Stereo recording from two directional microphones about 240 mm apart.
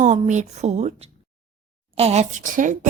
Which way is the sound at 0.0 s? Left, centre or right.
Right.